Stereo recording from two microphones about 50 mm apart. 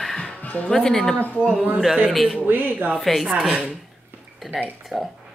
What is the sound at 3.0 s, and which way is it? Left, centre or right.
Speech, centre.